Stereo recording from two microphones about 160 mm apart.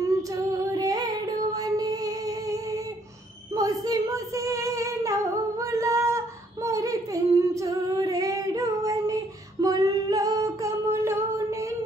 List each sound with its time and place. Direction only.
0.0 s female singing: 20° right (ahead or behind)